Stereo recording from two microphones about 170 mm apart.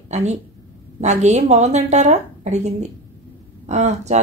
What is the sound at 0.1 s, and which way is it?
A woman's voice, 40° right (ahead or behind).